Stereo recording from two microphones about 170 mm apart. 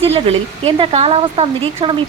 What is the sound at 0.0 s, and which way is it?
Speech, 35° right (ahead or behind).